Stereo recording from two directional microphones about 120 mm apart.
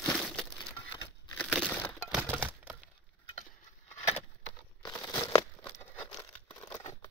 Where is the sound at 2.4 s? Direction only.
15° right (ahead or behind).